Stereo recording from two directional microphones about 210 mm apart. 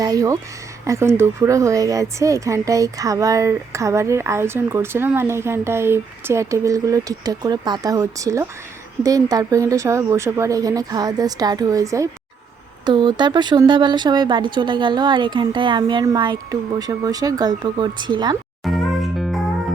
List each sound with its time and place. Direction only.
0.0 s speech: 15° right (ahead or behind)
18.6 s music: centre (ahead or behind)